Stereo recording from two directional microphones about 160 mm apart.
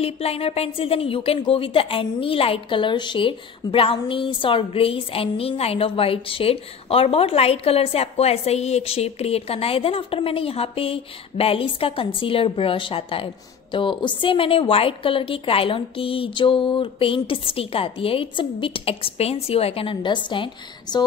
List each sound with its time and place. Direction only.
0.0 s a woman's voice: 40° left (ahead or behind)